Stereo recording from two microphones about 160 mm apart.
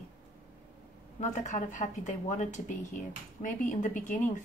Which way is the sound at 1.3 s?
50° left (ahead or behind).